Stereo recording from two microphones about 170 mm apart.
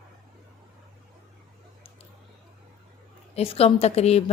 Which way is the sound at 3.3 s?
35° left (ahead or behind).